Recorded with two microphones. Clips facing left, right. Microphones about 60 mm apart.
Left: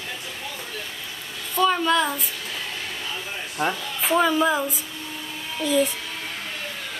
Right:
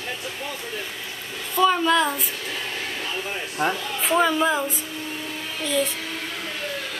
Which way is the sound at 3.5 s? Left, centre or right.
Centre.